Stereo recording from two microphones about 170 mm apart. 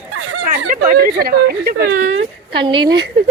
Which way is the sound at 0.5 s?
50° right (ahead or behind).